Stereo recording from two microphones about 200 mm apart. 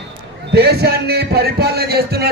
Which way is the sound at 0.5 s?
55° right (ahead or behind).